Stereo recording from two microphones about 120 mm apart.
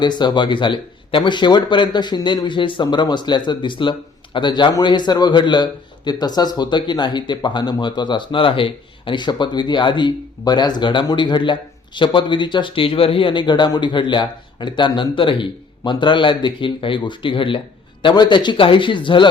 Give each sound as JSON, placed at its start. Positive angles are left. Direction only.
{"t": 0.0, "sound": "speech", "side_deg": 40}